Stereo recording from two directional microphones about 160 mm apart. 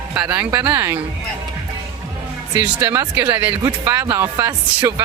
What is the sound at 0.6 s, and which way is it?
Speech, 25° right (ahead or behind).